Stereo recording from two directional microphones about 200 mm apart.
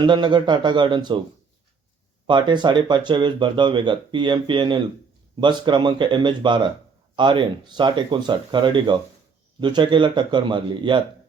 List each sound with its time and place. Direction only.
0.0 s speech: 20° right (ahead or behind)
2.2 s speech: 20° right (ahead or behind)